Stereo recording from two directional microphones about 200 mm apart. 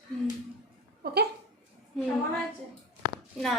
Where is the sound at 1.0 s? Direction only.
50° right (ahead or behind).